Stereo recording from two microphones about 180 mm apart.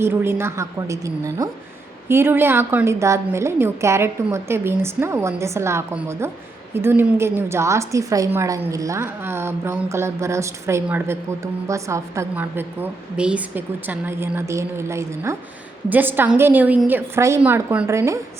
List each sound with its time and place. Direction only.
0.0 s speech: 10° right (ahead or behind)